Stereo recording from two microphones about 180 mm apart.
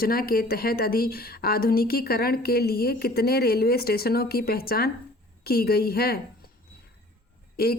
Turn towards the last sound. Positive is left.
turn(degrees=60)  # may be behind; listen again after turning